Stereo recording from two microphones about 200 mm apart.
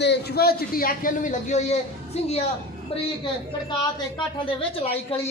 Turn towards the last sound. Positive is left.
turn(degrees=25)  # may be behind; listen again after turning